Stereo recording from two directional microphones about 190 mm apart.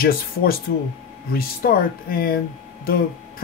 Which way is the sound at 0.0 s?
50° left (ahead or behind).